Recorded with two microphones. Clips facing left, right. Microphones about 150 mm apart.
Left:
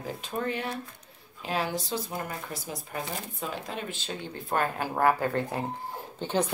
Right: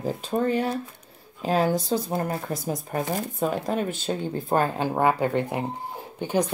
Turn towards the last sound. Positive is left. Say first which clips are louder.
# right 3 dB
turn(degrees=-15)  # may be behind; listen again after turning